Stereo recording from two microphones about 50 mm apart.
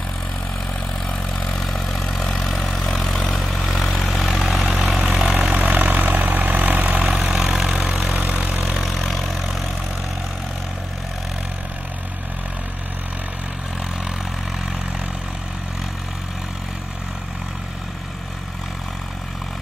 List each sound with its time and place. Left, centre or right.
1.0 s vehicle: centre
5.5 s vehicle: right
7.1 s vehicle: centre
8.1 s vehicle: right
8.8 s vehicle: centre